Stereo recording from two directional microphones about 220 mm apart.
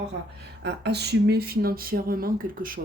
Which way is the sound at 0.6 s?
50° right (ahead or behind).